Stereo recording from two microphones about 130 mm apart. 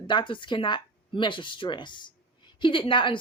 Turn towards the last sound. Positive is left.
turn(degrees=40)  # may be behind; listen again after turning